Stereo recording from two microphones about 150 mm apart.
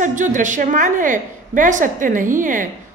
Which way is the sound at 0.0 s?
60° right (ahead or behind).